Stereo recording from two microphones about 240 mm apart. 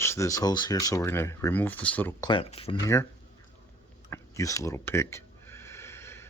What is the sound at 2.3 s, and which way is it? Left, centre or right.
Speech, left.